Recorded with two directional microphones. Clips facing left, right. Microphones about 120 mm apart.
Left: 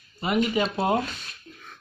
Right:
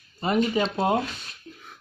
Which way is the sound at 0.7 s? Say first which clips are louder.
Right 1 dB; 20° right (ahead or behind).